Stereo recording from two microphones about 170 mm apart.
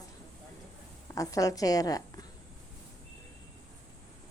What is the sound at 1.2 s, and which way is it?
A woman's voice, 20° left (ahead or behind).